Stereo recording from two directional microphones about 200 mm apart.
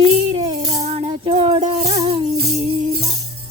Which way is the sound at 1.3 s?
30° right (ahead or behind).